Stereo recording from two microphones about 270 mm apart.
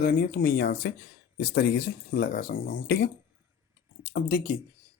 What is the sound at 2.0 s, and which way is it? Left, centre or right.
Speech, left.